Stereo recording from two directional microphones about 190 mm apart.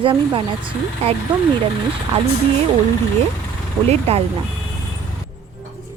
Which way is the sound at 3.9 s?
30° right (ahead or behind).